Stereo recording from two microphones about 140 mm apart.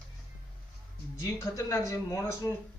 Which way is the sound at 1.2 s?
25° left (ahead or behind).